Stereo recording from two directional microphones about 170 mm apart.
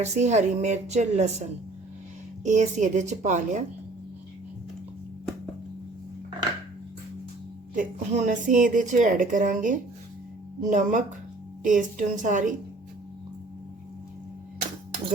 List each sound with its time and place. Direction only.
0.0 s a woman's voice: 45° right (ahead or behind)
7.8 s a woman's voice: 45° right (ahead or behind)